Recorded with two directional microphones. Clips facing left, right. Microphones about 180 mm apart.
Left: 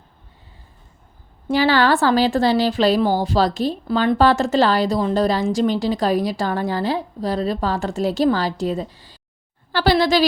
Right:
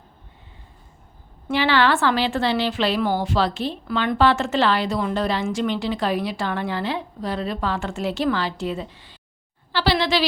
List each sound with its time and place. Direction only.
1.5 s a woman's voice: 40° left (ahead or behind)